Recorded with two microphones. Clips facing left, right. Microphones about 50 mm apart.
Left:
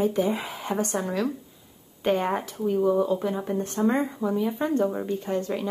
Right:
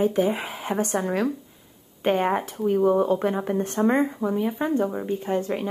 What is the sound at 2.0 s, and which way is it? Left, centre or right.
Speech, right.